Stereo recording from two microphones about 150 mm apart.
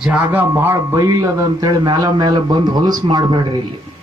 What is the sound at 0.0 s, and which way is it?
A man's voice, 10° right (ahead or behind).